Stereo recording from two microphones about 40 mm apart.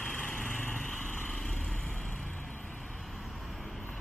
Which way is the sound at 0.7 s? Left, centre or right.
Left.